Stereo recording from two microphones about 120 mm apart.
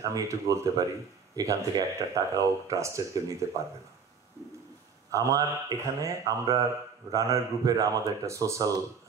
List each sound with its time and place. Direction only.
0.0 s speech: 30° right (ahead or behind)
5.1 s speech: 25° right (ahead or behind)